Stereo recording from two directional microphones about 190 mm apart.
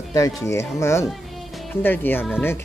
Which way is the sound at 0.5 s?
15° left (ahead or behind).